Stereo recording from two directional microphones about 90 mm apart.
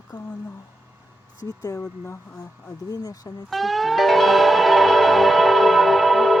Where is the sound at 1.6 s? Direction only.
40° left (ahead or behind).